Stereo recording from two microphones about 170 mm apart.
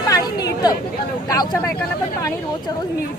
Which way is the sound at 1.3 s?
20° left (ahead or behind).